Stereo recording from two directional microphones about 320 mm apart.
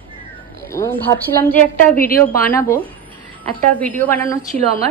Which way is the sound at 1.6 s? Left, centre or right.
Left.